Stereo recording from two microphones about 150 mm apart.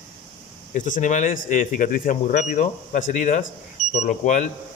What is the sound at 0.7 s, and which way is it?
Speech, 60° left (ahead or behind).